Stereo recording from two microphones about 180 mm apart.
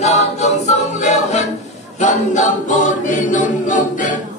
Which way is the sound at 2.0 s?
40° left (ahead or behind).